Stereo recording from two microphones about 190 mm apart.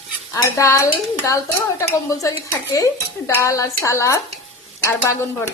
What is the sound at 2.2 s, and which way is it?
Speech, 15° left (ahead or behind).